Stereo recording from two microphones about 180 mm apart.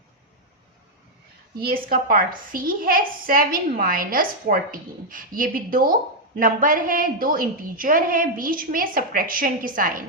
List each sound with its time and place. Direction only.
1.5 s a woman's voice: 55° right (ahead or behind)